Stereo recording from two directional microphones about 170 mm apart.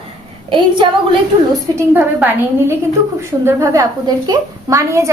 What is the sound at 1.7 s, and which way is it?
A woman's voice, 10° right (ahead or behind).